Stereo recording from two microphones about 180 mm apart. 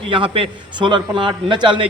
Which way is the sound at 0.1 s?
30° right (ahead or behind).